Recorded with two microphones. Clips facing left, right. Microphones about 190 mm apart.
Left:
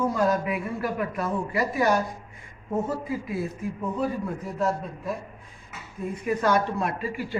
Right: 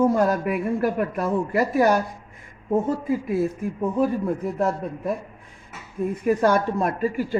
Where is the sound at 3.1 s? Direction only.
50° right (ahead or behind).